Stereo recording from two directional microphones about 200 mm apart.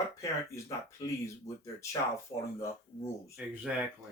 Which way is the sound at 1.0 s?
15° left (ahead or behind).